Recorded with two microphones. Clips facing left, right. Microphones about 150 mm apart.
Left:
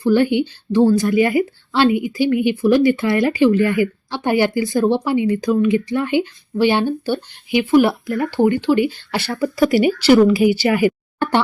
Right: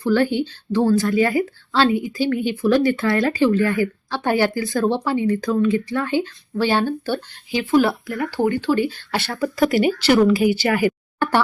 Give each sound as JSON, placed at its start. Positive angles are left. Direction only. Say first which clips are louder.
{"t": 0.0, "sound": "speech", "louder": "left 3 dB", "side_deg": 15}
{"t": 9.3, "sound": "speech", "louder": "left 3 dB", "side_deg": 0}
{"t": 10.3, "sound": "speech", "louder": "left 3 dB", "side_deg": -45}
{"t": 10.8, "sound": "a sound", "louder": "left 2 dB", "side_deg": 20}